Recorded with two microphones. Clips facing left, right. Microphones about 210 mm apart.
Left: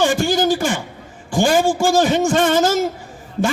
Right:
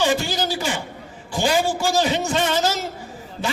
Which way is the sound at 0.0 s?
50° left (ahead or behind).